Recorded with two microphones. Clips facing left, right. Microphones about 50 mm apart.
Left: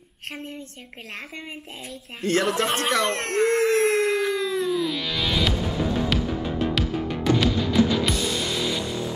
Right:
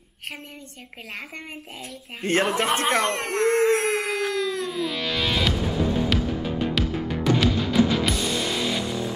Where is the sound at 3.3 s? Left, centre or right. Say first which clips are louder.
Even; right.